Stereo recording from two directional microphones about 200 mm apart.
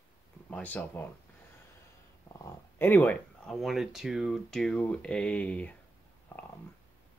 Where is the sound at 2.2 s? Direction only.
15° left (ahead or behind).